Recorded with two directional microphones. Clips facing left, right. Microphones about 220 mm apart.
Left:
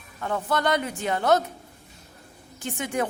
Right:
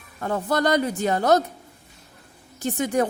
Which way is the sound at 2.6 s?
40° right (ahead or behind).